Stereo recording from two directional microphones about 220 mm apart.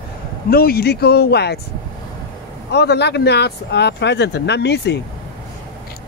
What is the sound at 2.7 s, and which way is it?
Speech, 50° left (ahead or behind).